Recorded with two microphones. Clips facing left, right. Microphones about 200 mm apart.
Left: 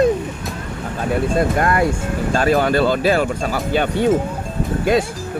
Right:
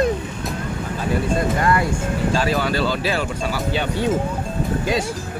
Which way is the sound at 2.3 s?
50° left (ahead or behind).